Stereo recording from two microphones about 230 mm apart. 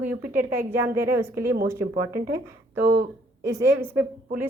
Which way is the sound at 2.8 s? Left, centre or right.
Right.